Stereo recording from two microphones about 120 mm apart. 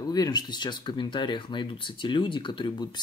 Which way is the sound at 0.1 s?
35° left (ahead or behind).